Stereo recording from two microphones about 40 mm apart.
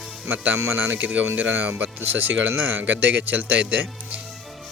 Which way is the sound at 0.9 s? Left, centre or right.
Right.